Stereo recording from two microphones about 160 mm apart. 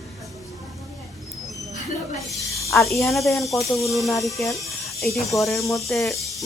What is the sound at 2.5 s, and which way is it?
Speech, 20° left (ahead or behind).